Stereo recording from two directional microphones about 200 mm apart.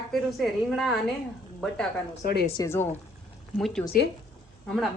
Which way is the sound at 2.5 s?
15° left (ahead or behind).